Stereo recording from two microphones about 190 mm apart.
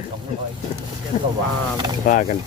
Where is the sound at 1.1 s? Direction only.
40° left (ahead or behind).